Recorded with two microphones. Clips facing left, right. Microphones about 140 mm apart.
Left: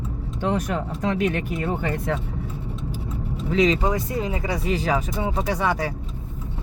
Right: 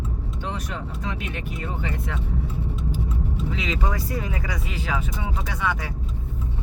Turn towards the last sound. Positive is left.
turn(degrees=35)  # may be behind; listen again after turning